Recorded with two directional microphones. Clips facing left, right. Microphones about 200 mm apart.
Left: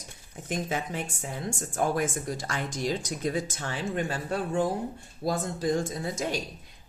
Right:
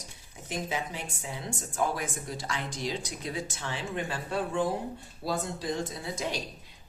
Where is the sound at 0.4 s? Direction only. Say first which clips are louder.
Left 3 dB; 50° left (ahead or behind).